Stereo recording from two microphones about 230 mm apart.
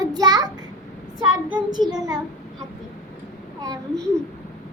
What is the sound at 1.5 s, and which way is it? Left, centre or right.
Speech, centre.